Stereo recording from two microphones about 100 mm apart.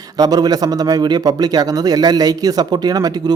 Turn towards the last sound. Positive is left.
turn(degrees=-40)  # may be behind; listen again after turning